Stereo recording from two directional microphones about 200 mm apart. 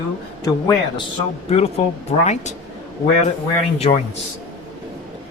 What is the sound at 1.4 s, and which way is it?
A man's voice, 30° left (ahead or behind).